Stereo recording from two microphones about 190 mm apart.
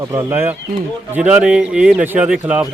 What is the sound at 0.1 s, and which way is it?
Speech, 15° right (ahead or behind).